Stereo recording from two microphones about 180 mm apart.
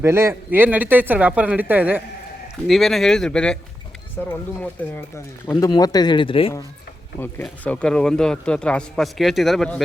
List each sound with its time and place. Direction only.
0.0 s speech: 15° right (ahead or behind)
2.6 s a man's voice: centre (ahead or behind); by 6.5 s 30° left (ahead or behind)
7.2 s a man's voice: 10° left (ahead or behind)